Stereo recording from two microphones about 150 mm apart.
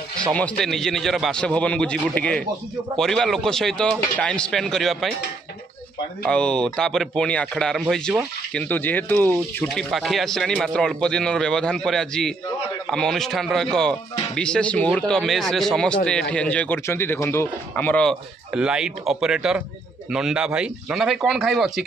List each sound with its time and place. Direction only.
0.3 s a man's voice: 5° left (ahead or behind)
6.2 s a man's voice: 5° left (ahead or behind)
9.8 s a man's voice: centre (ahead or behind)
18.5 s a man's voice: 5° right (ahead or behind)